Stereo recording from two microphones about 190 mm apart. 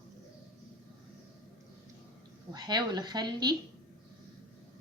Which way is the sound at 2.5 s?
20° right (ahead or behind).